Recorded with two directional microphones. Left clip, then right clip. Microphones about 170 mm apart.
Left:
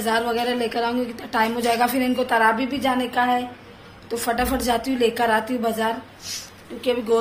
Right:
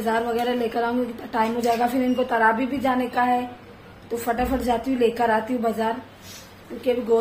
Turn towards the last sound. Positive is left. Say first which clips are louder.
# even
turn(degrees=0)  # may be behind; listen again after turning